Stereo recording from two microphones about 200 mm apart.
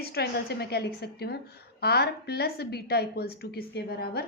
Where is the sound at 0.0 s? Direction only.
50° left (ahead or behind).